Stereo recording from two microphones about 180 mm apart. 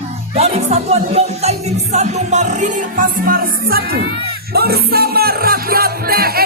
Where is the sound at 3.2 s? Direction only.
55° right (ahead or behind).